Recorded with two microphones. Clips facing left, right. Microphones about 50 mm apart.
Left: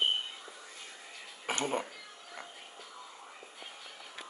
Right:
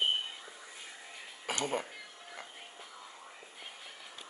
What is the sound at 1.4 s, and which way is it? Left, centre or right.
Speech, left.